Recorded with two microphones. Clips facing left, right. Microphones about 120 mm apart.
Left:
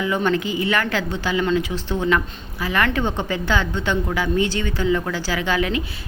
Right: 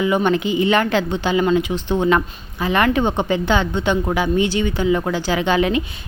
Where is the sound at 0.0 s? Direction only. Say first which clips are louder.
Right 3 dB; 20° right (ahead or behind).